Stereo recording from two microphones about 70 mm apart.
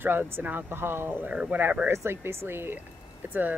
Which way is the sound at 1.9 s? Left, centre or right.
Right.